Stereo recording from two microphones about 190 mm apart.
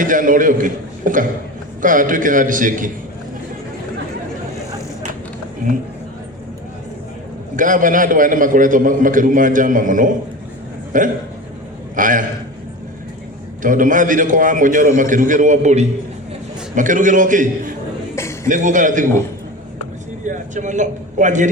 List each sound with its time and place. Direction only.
0.0 s a man's voice: 45° right (ahead or behind)
7.5 s a man's voice: 45° right (ahead or behind)
13.6 s a man's voice: 45° right (ahead or behind)
18.1 s a sound: 15° left (ahead or behind)
18.4 s a man's voice: 40° right (ahead or behind)
20.2 s a man's voice: 40° right (ahead or behind)